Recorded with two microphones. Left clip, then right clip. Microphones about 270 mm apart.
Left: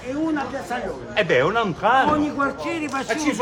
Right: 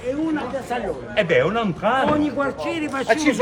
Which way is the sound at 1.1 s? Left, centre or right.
Centre.